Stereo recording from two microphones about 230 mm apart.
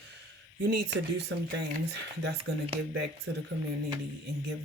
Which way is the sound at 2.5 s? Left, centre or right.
Right.